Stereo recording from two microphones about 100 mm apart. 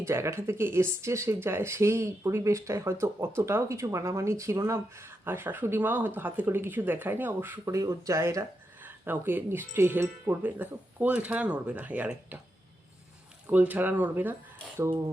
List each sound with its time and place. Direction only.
0.0 s speech: 30° right (ahead or behind)
7.6 s speech: 30° right (ahead or behind); by 12.4 s 15° right (ahead or behind)
13.5 s speech: 15° right (ahead or behind)